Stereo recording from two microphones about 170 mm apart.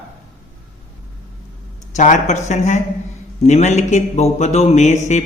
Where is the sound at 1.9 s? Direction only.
45° left (ahead or behind).